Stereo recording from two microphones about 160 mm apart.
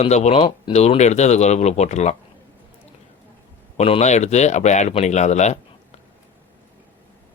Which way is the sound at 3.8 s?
40° left (ahead or behind).